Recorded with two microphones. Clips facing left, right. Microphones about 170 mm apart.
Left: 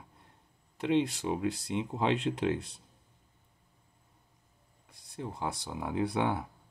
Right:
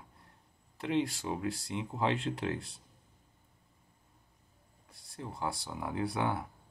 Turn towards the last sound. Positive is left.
turn(degrees=20)  # may be behind; listen again after turning